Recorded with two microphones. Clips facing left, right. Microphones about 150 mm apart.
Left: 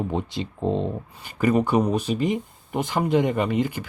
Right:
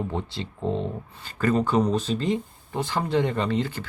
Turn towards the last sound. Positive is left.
turn(degrees=15)  # may be behind; listen again after turning